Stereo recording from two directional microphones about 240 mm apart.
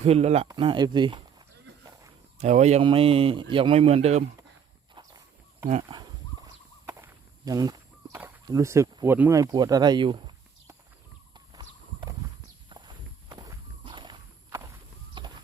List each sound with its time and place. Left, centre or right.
0.0 s speech: right
4.9 s walk: centre
9.1 s speech: centre
11.3 s horse: centre
12.6 s walk: centre
15.2 s horse: centre